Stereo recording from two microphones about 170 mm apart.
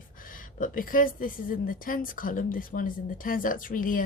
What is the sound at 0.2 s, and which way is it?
A woman's voice, 55° left (ahead or behind).